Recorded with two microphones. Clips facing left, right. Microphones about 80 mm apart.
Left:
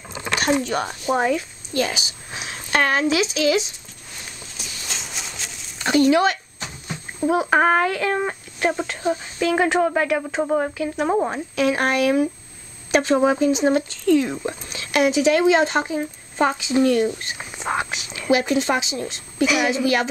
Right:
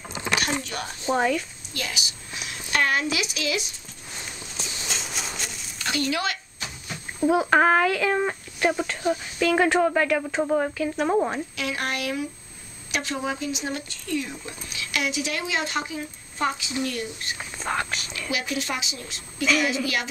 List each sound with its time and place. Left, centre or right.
0.7 s speech: left
1.0 s speech: centre
1.7 s a sound: left
4.6 s a sound: centre
5.8 s a sound: left
7.2 s speech: centre
11.5 s speech: left
14.7 s speech: left
19.4 s speech: centre